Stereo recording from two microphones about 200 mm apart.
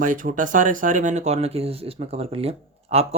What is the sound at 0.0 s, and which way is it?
Speech, 40° right (ahead or behind).